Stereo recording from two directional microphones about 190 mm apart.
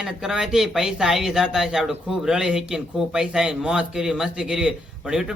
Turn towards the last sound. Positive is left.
turn(degrees=-5)  # may be behind; listen again after turning